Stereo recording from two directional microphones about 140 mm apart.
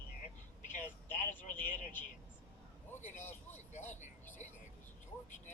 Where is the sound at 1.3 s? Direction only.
15° left (ahead or behind).